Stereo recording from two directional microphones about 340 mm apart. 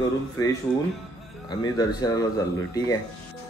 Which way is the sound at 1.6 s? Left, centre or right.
Centre.